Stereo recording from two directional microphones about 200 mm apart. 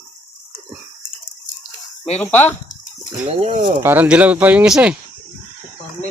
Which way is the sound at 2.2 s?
10° left (ahead or behind).